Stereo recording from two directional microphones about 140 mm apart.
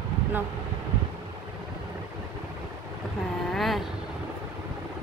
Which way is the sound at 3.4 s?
Centre (ahead or behind).